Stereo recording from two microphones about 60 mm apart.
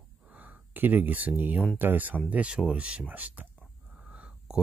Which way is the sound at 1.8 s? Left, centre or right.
Right.